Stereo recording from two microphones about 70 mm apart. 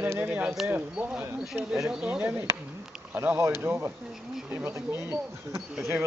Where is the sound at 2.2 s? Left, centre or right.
Right.